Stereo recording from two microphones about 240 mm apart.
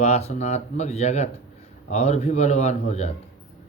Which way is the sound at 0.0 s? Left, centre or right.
Left.